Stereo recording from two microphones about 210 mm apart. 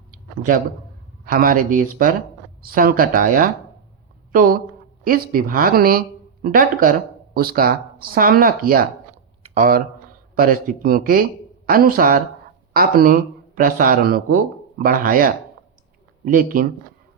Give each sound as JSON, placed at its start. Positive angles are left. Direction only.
{"t": 0.1, "sound": "a sound", "side_deg": -40}
{"t": 1.2, "sound": "speech", "side_deg": -45}
{"t": 9.4, "sound": "typing", "side_deg": -40}
{"t": 10.3, "sound": "speech", "side_deg": -45}